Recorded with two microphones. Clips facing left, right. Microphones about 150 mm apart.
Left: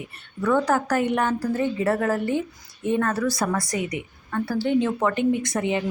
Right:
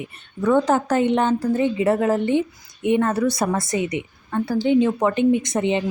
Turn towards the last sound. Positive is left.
turn(degrees=-25)  # may be behind; listen again after turning